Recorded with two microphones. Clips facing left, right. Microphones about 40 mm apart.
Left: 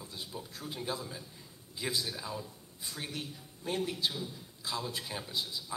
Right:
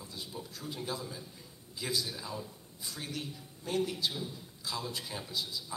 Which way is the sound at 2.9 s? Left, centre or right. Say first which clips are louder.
Even; left.